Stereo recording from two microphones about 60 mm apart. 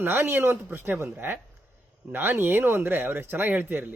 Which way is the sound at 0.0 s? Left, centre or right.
Right.